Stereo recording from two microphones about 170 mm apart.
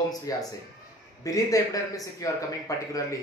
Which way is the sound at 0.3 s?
20° left (ahead or behind).